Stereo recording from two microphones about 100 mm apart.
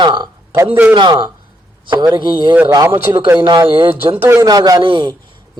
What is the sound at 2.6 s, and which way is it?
Speech, 35° right (ahead or behind).